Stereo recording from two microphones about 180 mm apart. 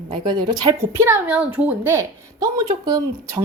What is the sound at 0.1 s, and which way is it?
Speech, 25° right (ahead or behind).